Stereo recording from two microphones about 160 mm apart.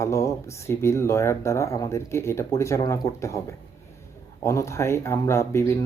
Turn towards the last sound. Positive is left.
turn(degrees=15)  # may be behind; listen again after turning